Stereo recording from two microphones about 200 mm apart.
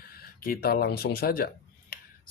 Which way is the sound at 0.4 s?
50° left (ahead or behind).